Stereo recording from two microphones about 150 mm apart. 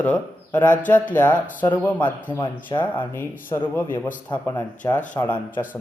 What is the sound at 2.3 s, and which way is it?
Speech, 30° left (ahead or behind).